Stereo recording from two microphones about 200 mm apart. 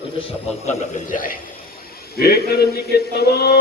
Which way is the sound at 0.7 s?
40° left (ahead or behind).